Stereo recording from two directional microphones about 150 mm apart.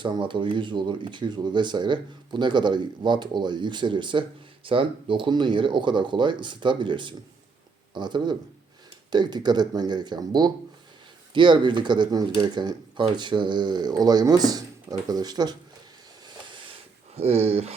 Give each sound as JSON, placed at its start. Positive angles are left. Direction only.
{"t": 0.0, "sound": "speech", "side_deg": -35}
{"t": 17.2, "sound": "speech", "side_deg": -45}